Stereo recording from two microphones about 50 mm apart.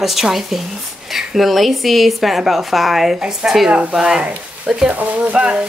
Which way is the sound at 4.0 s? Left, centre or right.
Centre.